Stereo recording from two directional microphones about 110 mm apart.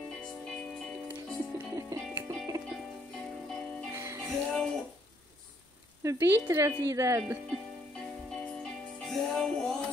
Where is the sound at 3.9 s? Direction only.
25° right (ahead or behind).